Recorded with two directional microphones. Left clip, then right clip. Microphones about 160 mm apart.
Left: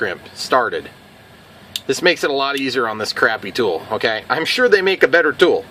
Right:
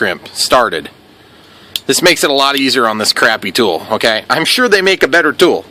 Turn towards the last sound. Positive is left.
turn(degrees=-75)  # may be behind; listen again after turning